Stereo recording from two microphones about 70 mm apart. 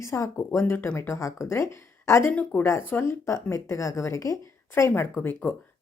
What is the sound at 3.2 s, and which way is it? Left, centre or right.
A woman's voice, left.